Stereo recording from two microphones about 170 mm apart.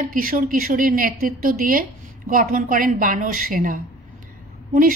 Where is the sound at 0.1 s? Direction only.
55° right (ahead or behind).